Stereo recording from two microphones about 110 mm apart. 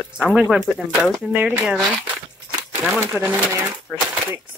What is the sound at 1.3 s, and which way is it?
Speech, 15° right (ahead or behind).